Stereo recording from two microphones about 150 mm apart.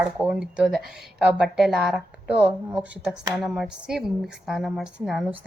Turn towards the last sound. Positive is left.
turn(degrees=0)  # may be behind; listen again after turning